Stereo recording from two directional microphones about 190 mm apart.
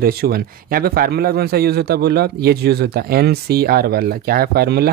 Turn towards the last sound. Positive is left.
turn(degrees=-55)  # may be behind; listen again after turning